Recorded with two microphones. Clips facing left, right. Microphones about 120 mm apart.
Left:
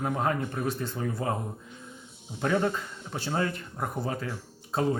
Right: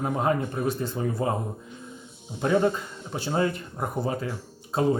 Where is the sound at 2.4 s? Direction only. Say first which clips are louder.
Right 4 dB; 20° right (ahead or behind).